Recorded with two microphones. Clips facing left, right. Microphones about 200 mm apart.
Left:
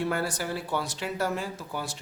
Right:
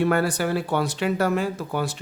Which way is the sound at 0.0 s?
65° right (ahead or behind).